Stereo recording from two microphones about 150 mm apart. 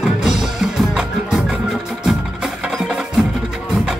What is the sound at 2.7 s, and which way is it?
Music, 5° right (ahead or behind).